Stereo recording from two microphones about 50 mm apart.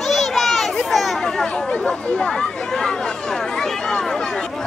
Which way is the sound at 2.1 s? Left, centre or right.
Centre.